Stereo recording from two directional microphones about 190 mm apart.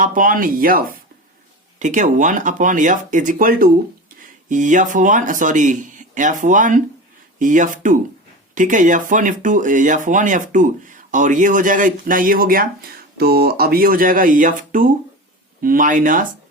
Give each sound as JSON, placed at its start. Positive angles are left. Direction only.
{"t": 0.0, "sound": "speech", "side_deg": -45}